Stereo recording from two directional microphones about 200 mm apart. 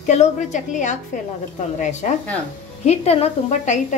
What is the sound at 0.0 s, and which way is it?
Speech, 35° left (ahead or behind).